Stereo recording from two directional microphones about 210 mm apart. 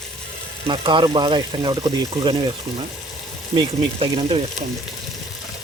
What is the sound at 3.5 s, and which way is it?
Speech, 25° right (ahead or behind).